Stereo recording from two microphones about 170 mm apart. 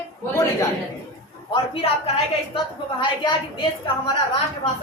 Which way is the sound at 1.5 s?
35° left (ahead or behind).